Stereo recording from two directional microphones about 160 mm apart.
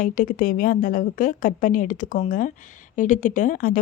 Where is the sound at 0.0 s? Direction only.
60° left (ahead or behind).